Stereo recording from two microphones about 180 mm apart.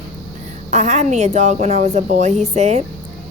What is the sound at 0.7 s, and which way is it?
Speech, 40° right (ahead or behind).